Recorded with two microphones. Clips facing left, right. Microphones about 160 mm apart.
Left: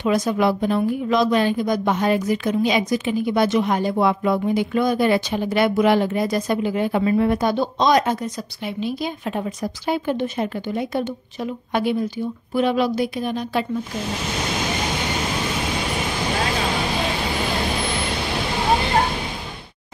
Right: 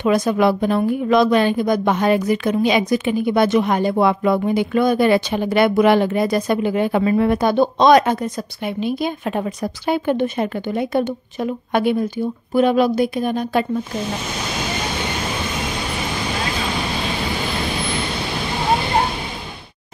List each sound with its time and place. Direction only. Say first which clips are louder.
0.0 s a woman's voice: right 3 dB; 60° right (ahead or behind)